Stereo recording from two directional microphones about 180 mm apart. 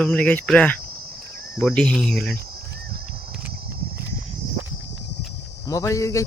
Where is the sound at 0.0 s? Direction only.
5° left (ahead or behind).